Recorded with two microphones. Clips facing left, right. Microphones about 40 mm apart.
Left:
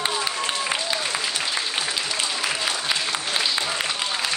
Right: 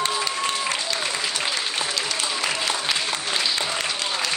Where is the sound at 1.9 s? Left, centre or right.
Centre.